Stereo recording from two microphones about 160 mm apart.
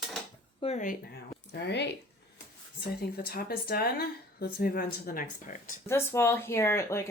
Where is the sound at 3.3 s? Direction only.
70° left (ahead or behind).